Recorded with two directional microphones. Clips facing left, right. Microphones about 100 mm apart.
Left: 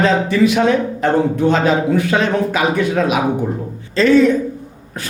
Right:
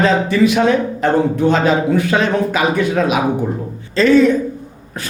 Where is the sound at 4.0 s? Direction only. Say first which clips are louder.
Even; 15° right (ahead or behind).